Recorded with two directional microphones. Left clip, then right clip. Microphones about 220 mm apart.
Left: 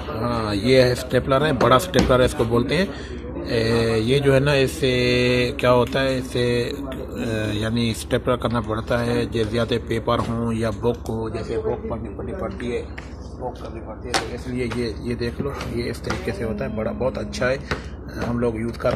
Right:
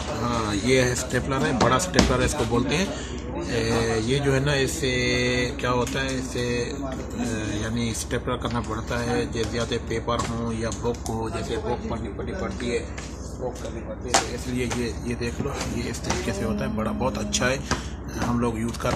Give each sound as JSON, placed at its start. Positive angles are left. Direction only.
{"t": 0.2, "sound": "speech", "side_deg": 20}
{"t": 14.6, "sound": "speech", "side_deg": 15}
{"t": 18.8, "sound": "speech", "side_deg": 5}